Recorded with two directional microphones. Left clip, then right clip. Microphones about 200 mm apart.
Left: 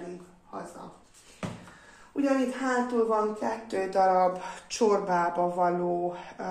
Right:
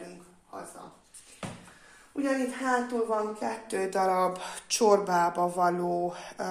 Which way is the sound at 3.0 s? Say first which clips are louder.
Left 3 dB; 40° right (ahead or behind).